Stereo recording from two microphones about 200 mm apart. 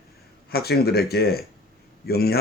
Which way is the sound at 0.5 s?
50° left (ahead or behind).